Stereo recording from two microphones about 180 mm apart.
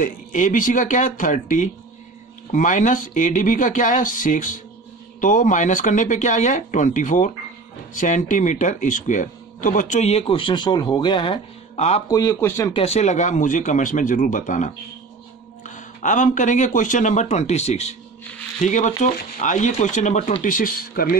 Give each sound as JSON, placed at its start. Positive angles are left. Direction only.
{"t": 0.0, "sound": "a man's voice", "side_deg": 45}
{"t": 11.7, "sound": "speech", "side_deg": 35}
{"t": 12.1, "sound": "a man's voice", "side_deg": 20}
{"t": 12.7, "sound": "a man's voice", "side_deg": 35}